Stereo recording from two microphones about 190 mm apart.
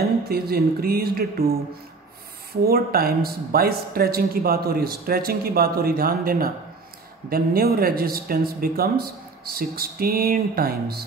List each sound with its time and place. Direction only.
0.2 s speech: 55° right (ahead or behind)
2.6 s speech: 50° right (ahead or behind)